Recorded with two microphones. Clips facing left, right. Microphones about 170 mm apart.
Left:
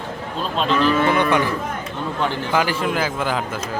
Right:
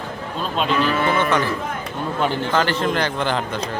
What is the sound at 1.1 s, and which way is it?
Speech, 15° left (ahead or behind).